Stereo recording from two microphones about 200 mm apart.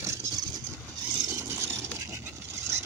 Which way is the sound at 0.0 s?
15° right (ahead or behind).